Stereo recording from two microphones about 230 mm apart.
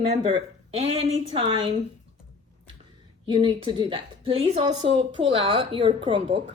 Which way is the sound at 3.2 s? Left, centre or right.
Right.